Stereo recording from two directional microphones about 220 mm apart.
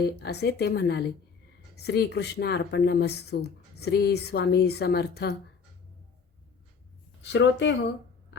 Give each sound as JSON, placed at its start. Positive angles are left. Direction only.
{"t": 0.0, "sound": "speech", "side_deg": 50}
{"t": 7.2, "sound": "speech", "side_deg": 55}